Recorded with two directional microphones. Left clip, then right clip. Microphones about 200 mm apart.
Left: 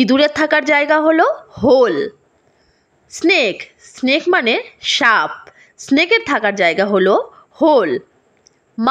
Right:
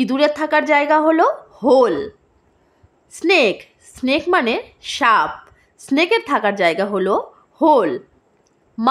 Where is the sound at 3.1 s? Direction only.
20° left (ahead or behind).